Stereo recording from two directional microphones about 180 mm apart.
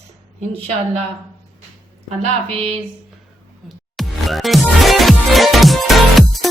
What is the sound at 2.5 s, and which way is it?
Speech, 35° right (ahead or behind).